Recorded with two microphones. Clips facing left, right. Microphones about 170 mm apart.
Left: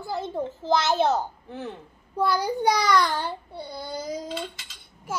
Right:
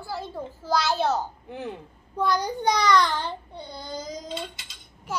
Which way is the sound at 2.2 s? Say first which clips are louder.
Left 1 dB; 10° left (ahead or behind).